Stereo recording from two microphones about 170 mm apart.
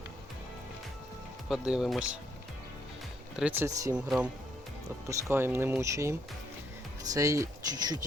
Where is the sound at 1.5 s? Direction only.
5° right (ahead or behind).